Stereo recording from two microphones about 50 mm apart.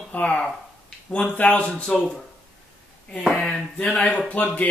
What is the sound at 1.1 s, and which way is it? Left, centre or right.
Speech, left.